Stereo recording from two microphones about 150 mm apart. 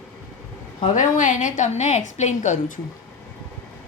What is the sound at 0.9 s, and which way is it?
A woman's voice, 60° left (ahead or behind).